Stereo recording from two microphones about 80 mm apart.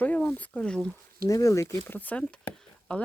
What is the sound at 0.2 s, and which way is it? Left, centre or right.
Speech, centre.